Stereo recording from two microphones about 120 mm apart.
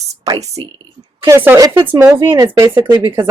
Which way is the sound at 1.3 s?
20° right (ahead or behind).